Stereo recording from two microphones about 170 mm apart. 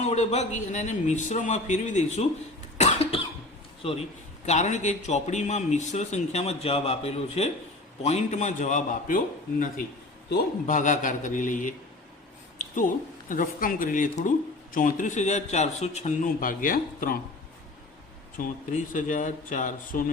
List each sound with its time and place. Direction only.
0.0 s speech: 40° left (ahead or behind)
2.7 s cough: 40° left (ahead or behind)
3.8 s a man's voice: 35° left (ahead or behind)
13.2 s speech: 55° left (ahead or behind)
18.4 s speech: 50° left (ahead or behind)